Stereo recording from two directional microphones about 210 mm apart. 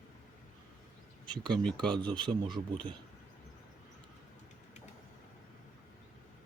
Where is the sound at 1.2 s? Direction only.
20° right (ahead or behind).